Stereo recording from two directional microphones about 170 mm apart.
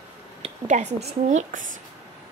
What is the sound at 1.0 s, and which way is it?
Speech, 45° right (ahead or behind).